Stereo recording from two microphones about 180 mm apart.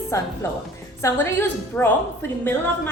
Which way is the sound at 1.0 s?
15° left (ahead or behind).